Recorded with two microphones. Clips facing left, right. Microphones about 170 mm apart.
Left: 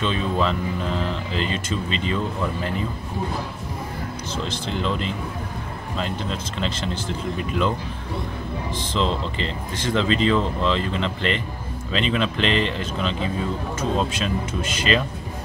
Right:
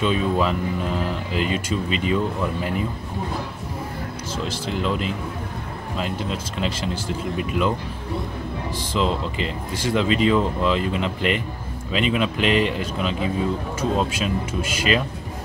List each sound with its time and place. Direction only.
0.0 s speech: 10° right (ahead or behind)
4.5 s speech: 5° right (ahead or behind)
8.7 s speech: 10° right (ahead or behind)